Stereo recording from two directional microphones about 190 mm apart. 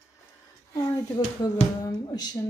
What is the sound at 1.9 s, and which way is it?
Speech, 20° left (ahead or behind).